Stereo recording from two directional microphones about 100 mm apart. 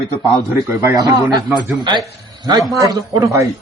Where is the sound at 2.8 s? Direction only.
35° right (ahead or behind).